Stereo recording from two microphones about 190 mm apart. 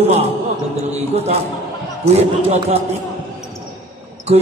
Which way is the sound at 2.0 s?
35° right (ahead or behind).